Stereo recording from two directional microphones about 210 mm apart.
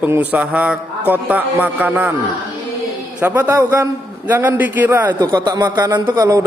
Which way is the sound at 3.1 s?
10° right (ahead or behind).